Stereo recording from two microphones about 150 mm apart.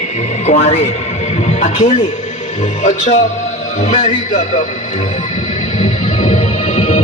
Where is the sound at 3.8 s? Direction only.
50° left (ahead or behind).